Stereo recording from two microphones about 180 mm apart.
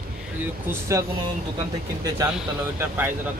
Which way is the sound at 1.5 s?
20° right (ahead or behind).